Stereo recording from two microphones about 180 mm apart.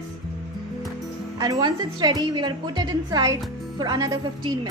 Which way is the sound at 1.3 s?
20° right (ahead or behind).